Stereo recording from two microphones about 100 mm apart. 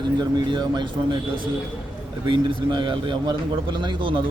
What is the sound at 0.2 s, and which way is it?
A man's voice, 45° right (ahead or behind).